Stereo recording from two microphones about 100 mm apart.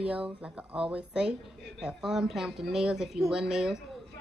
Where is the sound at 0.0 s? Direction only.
10° right (ahead or behind).